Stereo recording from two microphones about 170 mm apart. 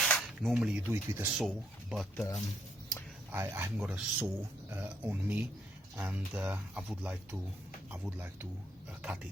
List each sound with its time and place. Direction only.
0.0 s speech: 5° left (ahead or behind)
1.4 s speech: centre (ahead or behind)
3.3 s speech: 15° right (ahead or behind)